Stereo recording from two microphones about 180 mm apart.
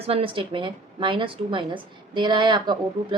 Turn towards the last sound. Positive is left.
turn(degrees=-25)  # may be behind; listen again after turning